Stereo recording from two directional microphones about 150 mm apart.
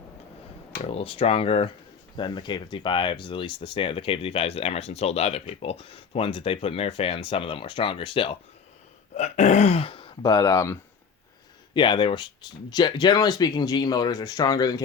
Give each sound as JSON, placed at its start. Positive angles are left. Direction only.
{"t": 0.9, "sound": "speech", "side_deg": 40}
{"t": 9.1, "sound": "speech", "side_deg": 50}
{"t": 11.7, "sound": "speech", "side_deg": 30}